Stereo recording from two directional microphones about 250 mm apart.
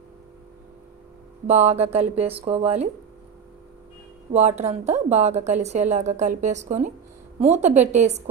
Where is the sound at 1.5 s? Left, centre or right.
Right.